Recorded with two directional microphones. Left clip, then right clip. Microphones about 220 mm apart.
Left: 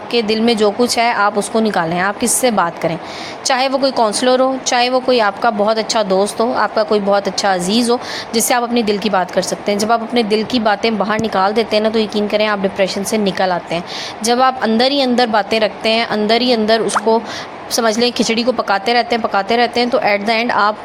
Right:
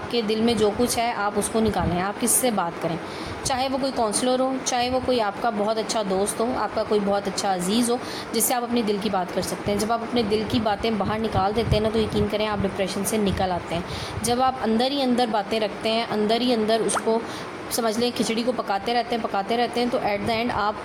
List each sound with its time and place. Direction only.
0.1 s speech: 20° left (ahead or behind)